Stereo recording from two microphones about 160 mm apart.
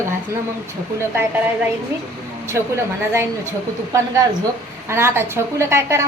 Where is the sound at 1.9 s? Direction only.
15° right (ahead or behind).